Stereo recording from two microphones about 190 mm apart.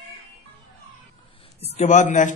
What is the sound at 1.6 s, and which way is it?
Speech, 35° left (ahead or behind).